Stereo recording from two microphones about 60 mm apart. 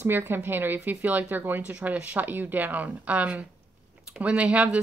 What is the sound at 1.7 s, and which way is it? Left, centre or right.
Speech, right.